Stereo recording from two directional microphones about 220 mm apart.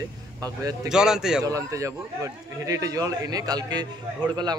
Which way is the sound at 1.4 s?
15° right (ahead or behind).